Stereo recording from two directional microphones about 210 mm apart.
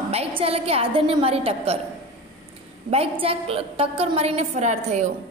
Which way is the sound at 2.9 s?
25° right (ahead or behind).